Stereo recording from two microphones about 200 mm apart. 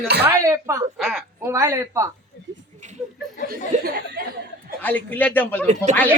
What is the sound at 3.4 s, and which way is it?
Speech, 50° right (ahead or behind).